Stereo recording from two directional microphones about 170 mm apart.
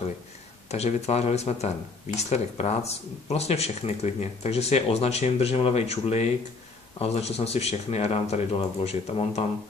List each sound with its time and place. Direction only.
0.7 s speech: 40° left (ahead or behind)